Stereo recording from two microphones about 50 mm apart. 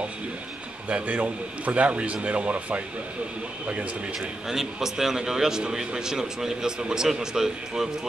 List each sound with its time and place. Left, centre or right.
0.8 s a man's voice: right
4.5 s a man's voice: centre